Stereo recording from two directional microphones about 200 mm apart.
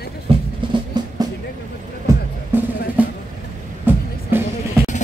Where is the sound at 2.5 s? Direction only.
10° right (ahead or behind).